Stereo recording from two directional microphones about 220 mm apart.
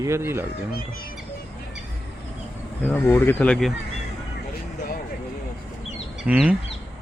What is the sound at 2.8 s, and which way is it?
Speech, 10° left (ahead or behind).